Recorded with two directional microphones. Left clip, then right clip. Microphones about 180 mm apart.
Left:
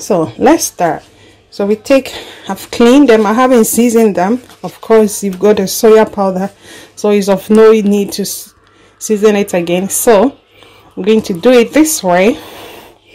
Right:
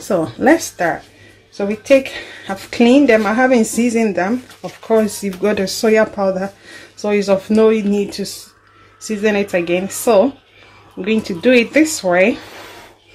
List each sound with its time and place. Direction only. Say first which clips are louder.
0.0 s speech: left 5 dB; 30° left (ahead or behind)